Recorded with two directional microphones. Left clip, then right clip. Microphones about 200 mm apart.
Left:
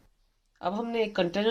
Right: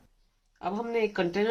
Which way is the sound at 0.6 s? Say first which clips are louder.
Even; 35° left (ahead or behind).